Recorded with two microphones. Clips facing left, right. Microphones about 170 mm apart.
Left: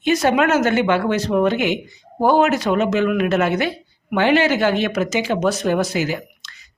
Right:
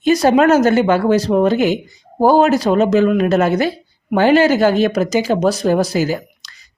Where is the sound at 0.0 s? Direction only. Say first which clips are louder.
Right 5 dB; 35° right (ahead or behind).